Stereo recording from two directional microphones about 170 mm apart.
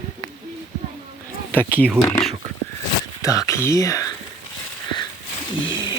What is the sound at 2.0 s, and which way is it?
Speech, 15° left (ahead or behind).